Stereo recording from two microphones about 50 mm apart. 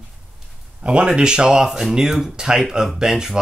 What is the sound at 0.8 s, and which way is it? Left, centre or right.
Speech, right.